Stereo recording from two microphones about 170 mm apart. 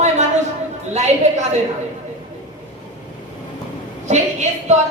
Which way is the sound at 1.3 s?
40° right (ahead or behind).